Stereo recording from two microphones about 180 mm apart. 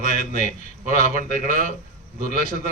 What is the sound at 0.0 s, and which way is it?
A man's voice, 40° left (ahead or behind).